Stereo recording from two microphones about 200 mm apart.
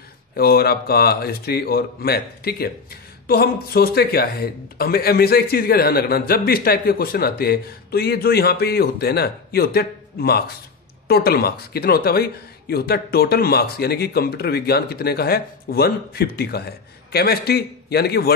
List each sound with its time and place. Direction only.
0.4 s speech: 50° left (ahead or behind)